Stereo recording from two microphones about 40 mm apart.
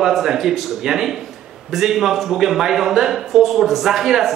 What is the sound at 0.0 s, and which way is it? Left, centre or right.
A man's voice, centre.